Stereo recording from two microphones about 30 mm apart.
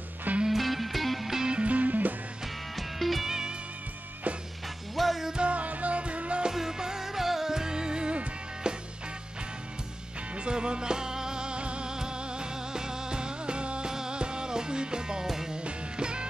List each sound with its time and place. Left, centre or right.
0.5 s music: centre
1.2 s music: centre
1.5 s music: right
2.7 s music: centre
3.3 s music: right
4.9 s music: centre
5.4 s music: right
6.5 s music: centre
10.3 s music: right
11.9 s music: right
13.8 s music: right
15.2 s music: centre
15.6 s music: right